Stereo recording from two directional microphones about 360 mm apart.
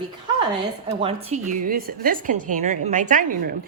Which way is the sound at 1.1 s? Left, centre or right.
Centre.